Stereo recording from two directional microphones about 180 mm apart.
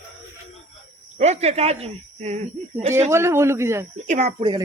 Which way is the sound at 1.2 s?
35° right (ahead or behind).